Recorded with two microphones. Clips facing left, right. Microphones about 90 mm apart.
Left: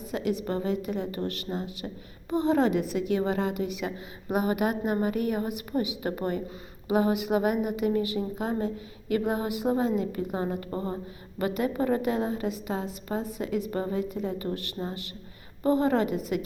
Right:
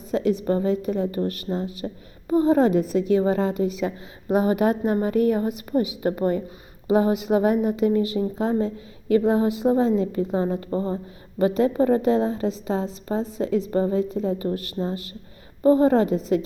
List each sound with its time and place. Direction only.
0.1 s a woman's voice: 35° right (ahead or behind)
1.1 s a woman's voice: 25° right (ahead or behind)
14.8 s a man's voice: 10° right (ahead or behind)
15.6 s a woman's voice: 25° right (ahead or behind)